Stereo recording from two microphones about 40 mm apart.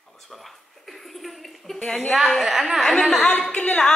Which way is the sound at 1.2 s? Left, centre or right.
Centre.